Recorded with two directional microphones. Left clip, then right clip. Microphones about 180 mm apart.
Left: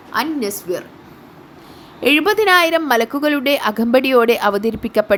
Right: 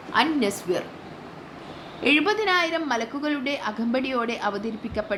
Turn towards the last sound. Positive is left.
turn(degrees=60)  # may be behind; listen again after turning